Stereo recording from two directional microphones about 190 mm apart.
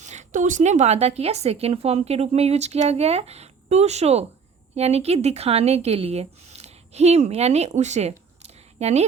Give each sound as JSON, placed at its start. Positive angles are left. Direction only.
{"t": 0.0, "sound": "a woman's voice", "side_deg": -40}